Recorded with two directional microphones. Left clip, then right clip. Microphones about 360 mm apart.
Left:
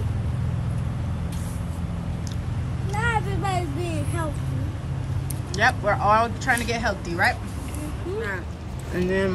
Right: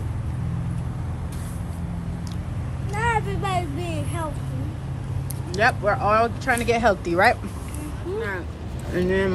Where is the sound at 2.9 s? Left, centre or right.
Centre.